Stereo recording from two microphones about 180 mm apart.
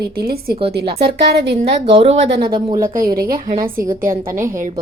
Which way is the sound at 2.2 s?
65° right (ahead or behind).